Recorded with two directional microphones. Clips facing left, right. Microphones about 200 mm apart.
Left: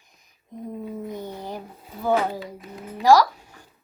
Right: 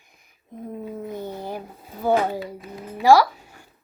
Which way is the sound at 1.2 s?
10° right (ahead or behind).